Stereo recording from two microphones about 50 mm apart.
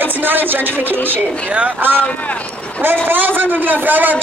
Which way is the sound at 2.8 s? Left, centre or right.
Right.